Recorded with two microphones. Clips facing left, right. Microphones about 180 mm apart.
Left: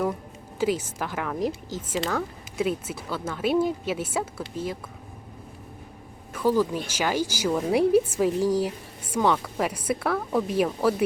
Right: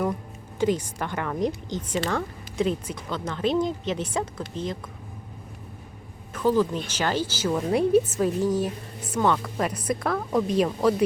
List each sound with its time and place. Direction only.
0.6 s a woman's voice: 5° left (ahead or behind)
6.3 s a woman's voice: 10° left (ahead or behind)